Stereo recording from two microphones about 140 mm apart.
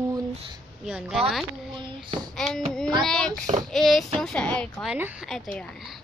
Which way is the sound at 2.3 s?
5° left (ahead or behind).